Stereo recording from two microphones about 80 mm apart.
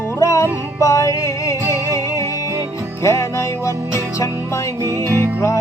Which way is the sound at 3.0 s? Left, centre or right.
Left.